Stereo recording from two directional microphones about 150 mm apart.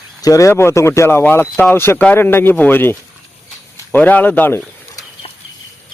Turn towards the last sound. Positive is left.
turn(degrees=10)  # may be behind; listen again after turning